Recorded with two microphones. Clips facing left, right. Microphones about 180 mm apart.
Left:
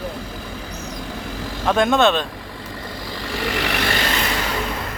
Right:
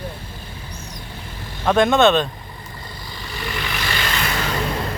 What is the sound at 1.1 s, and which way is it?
Vehicle, 90° left.